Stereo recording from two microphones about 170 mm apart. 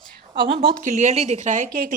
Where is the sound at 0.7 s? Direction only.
45° right (ahead or behind).